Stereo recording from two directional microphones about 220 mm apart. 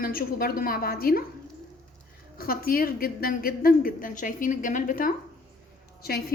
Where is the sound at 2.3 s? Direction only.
40° left (ahead or behind).